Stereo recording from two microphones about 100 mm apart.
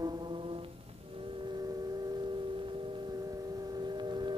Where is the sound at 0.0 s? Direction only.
45° right (ahead or behind); by 0.7 s 60° right (ahead or behind).